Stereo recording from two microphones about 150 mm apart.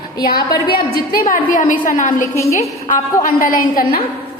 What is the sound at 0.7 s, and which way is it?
Speech, 90° left.